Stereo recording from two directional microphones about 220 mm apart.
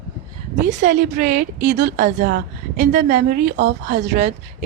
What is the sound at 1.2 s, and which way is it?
A woman's voice, 45° right (ahead or behind).